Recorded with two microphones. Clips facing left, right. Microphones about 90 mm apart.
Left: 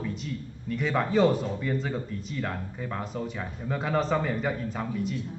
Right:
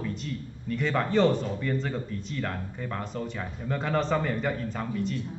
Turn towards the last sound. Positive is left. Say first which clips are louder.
# even
turn(degrees=5)  # may be behind; listen again after turning